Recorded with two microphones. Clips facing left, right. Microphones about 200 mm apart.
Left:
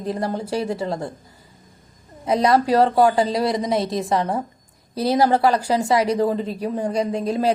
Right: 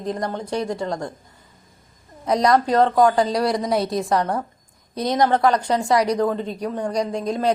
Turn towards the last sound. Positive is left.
turn(degrees=5)  # may be behind; listen again after turning